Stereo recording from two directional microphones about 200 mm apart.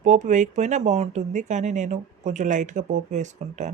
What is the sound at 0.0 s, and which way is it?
Speech, 40° right (ahead or behind).